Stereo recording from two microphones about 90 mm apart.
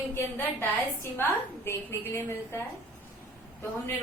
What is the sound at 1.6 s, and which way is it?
Speech, 30° left (ahead or behind).